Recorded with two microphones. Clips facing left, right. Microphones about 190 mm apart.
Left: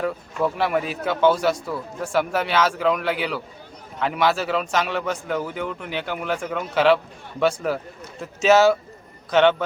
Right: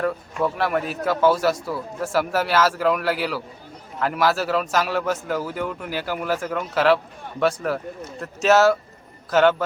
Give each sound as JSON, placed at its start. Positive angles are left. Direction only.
{"t": 0.0, "sound": "a man's voice", "side_deg": 0}